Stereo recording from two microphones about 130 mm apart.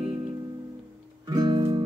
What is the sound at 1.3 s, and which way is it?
Music, 35° right (ahead or behind).